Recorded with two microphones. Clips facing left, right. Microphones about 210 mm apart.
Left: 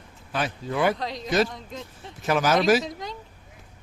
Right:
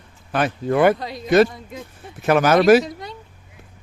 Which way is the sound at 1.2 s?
60° right (ahead or behind).